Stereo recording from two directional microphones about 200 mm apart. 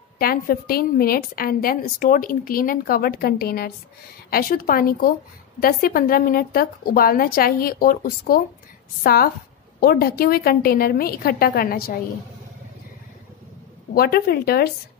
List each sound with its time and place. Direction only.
0.2 s a woman's voice: 50° left (ahead or behind)
13.9 s a woman's voice: 50° left (ahead or behind)